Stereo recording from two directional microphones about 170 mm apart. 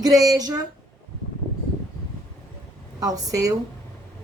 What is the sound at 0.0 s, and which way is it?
Speech, 20° right (ahead or behind).